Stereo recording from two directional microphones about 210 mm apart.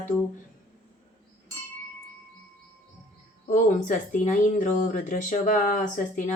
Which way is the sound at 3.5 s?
40° left (ahead or behind).